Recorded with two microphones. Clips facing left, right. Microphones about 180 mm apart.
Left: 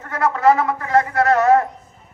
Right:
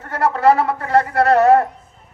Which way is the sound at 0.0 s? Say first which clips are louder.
Right 1 dB; 35° right (ahead or behind).